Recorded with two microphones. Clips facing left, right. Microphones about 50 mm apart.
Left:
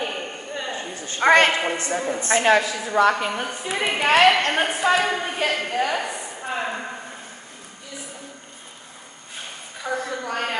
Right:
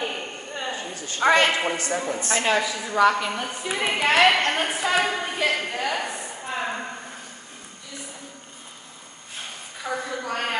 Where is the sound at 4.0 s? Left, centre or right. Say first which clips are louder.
Left 2 dB; left.